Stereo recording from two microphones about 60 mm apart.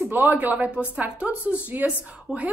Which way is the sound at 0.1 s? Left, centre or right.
Right.